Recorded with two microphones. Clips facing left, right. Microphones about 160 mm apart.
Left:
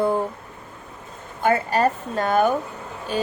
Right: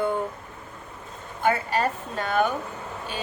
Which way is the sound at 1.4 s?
45° left (ahead or behind).